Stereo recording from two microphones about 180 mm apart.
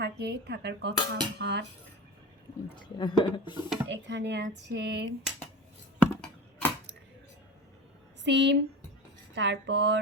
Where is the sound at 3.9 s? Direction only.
75° right (ahead or behind).